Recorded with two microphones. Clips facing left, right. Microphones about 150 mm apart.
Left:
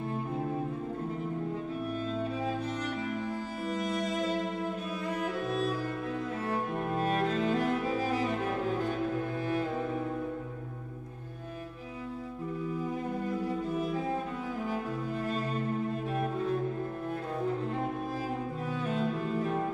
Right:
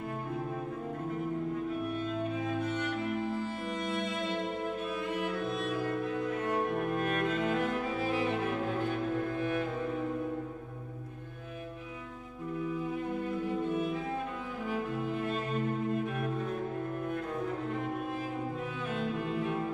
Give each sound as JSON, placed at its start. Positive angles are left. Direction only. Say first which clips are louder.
{"t": 2.4, "sound": "music", "louder": "even", "side_deg": 35}
{"t": 13.5, "sound": "music", "louder": "even", "side_deg": 35}
{"t": 14.7, "sound": "cello", "louder": "even", "side_deg": 40}
{"t": 18.9, "sound": "cello", "louder": "left 2 dB", "side_deg": 40}